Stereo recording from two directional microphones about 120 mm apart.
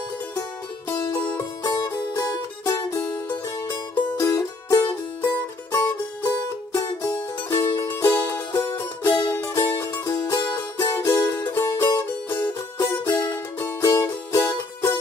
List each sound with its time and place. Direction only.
0.4 s music: 30° left (ahead or behind)
12.7 s music: 25° left (ahead or behind)